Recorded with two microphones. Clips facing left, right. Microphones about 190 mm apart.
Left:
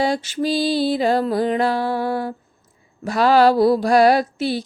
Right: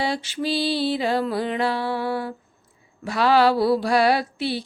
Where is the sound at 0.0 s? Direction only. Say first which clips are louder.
Left 5 dB; 45° left (ahead or behind).